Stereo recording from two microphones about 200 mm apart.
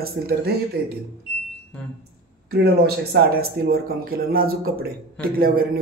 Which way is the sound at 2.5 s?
50° right (ahead or behind).